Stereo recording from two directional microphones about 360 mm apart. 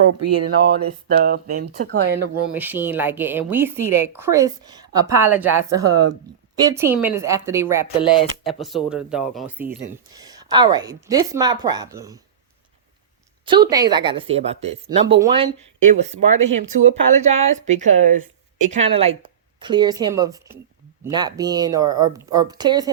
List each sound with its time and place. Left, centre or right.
0.0 s speech: right
1.0 s speech: right
2.6 s speech: centre
8.0 s speech: centre
8.6 s speech: centre
13.4 s speech: centre